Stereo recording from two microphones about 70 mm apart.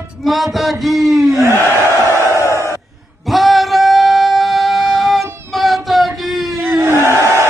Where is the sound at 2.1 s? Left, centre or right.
Right.